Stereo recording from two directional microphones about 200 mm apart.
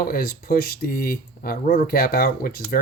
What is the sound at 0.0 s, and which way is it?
Speech, 45° left (ahead or behind).